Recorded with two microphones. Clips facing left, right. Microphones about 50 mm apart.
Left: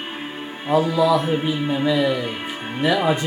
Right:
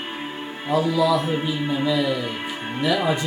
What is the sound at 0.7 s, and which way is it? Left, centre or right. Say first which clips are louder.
Speech: left 2 dB; left.